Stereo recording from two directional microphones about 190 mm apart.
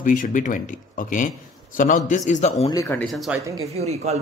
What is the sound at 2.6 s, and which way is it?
Speech, 20° left (ahead or behind).